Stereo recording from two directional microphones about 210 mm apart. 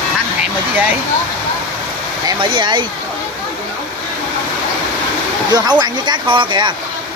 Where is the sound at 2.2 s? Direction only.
20° right (ahead or behind).